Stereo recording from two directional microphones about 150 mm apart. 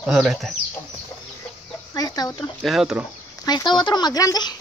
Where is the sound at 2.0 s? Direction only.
25° left (ahead or behind).